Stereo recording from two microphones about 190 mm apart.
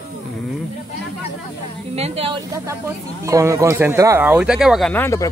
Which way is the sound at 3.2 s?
15° right (ahead or behind).